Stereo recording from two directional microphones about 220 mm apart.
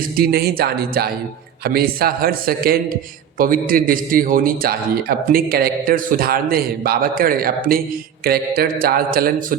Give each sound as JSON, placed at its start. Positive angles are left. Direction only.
{"t": 0.2, "sound": "a man's voice", "side_deg": -45}